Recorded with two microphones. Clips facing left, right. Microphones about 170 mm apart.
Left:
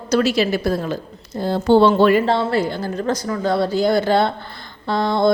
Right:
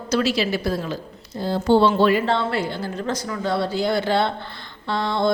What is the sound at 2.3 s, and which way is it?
Speech, 40° left (ahead or behind).